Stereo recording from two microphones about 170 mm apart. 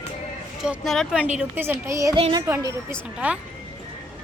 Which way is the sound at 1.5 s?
15° right (ahead or behind).